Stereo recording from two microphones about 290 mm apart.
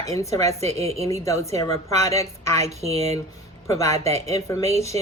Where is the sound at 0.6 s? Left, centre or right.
Right.